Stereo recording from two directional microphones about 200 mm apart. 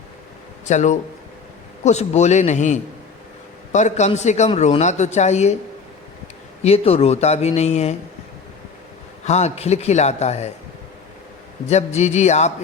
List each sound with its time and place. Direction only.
0.6 s a man's voice: 35° left (ahead or behind)
6.6 s a man's voice: 30° left (ahead or behind)
9.2 s a man's voice: 35° left (ahead or behind)
11.7 s a man's voice: 35° left (ahead or behind)